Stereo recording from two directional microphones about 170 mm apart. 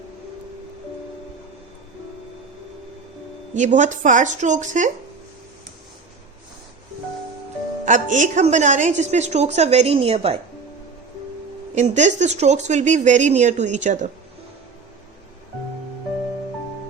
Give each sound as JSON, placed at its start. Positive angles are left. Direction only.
{"t": 3.5, "sound": "speech", "side_deg": -45}
{"t": 7.9, "sound": "a woman's voice", "side_deg": -45}
{"t": 11.7, "sound": "speech", "side_deg": -45}